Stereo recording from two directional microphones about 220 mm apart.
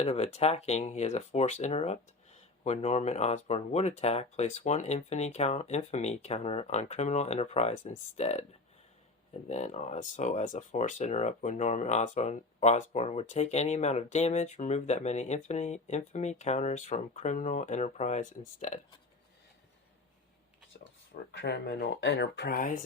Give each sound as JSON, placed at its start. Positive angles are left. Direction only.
{"t": 0.0, "sound": "speech", "side_deg": 25}
{"t": 9.5, "sound": "speech", "side_deg": 30}
{"t": 21.3, "sound": "speech", "side_deg": 50}